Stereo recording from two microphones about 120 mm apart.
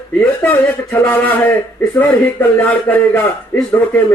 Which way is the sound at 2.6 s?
15° left (ahead or behind).